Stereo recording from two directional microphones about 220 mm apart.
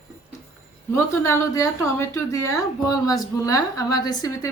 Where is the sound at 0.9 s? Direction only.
15° left (ahead or behind).